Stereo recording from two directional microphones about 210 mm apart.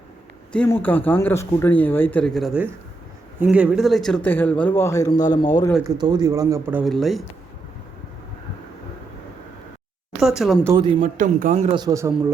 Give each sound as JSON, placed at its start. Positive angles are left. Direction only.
{"t": 0.5, "sound": "speech", "side_deg": 5}
{"t": 6.0, "sound": "speech", "side_deg": -20}
{"t": 10.2, "sound": "speech", "side_deg": 0}
{"t": 10.7, "sound": "speech", "side_deg": -20}
{"t": 11.0, "sound": "a man's voice", "side_deg": -40}
{"t": 11.8, "sound": "speech", "side_deg": -15}